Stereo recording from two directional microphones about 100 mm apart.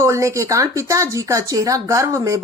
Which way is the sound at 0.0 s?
30° right (ahead or behind).